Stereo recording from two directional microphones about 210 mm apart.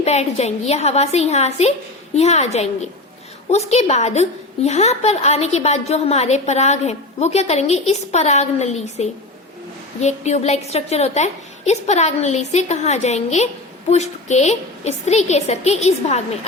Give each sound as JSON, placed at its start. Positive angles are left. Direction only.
{"t": 0.0, "sound": "a woman's voice", "side_deg": 30}